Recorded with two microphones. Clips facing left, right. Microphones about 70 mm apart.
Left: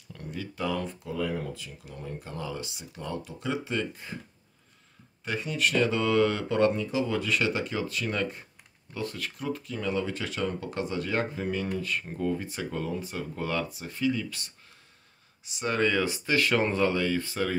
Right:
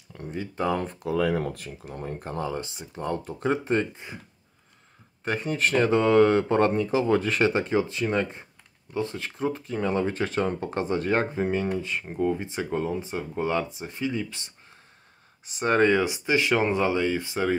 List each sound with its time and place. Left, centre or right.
0.1 s speech: right
0.9 s speech: right
1.8 s speech: right
3.9 s speech: centre
5.2 s speech: right
15.4 s speech: right
16.0 s speech: centre